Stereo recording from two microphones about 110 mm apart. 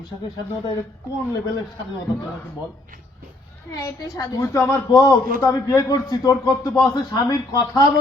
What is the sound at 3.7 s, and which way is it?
A man's voice, 30° left (ahead or behind).